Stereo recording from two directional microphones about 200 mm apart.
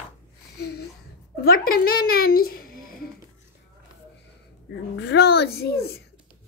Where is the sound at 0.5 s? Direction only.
55° left (ahead or behind).